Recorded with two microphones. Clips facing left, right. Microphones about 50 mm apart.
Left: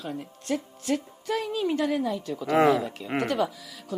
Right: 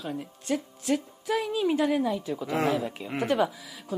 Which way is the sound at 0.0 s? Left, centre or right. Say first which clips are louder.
Even; centre.